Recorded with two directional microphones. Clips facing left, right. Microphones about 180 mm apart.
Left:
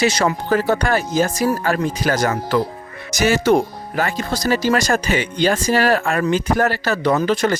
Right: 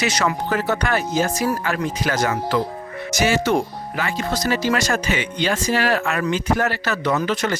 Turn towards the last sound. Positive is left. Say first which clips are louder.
# left 4 dB
turn(degrees=35)  # may be behind; listen again after turning